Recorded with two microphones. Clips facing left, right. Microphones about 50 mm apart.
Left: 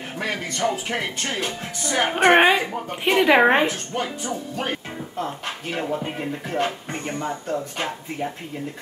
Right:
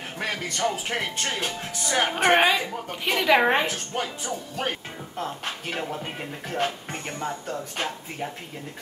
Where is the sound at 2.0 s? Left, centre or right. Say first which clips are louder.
Left 5 dB; left.